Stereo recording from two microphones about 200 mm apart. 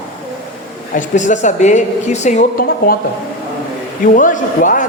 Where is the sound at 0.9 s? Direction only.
40° left (ahead or behind).